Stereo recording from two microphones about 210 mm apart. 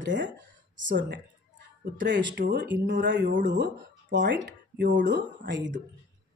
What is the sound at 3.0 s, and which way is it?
Speech, 60° right (ahead or behind).